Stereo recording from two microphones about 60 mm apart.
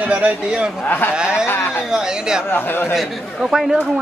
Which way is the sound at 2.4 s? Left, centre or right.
Left.